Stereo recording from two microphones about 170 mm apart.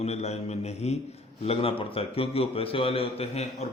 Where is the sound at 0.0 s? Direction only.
40° left (ahead or behind).